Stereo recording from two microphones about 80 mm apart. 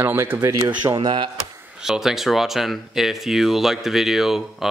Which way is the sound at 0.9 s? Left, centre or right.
Right.